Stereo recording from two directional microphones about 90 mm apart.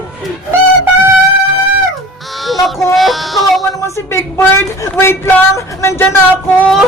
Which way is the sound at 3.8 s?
30° left (ahead or behind).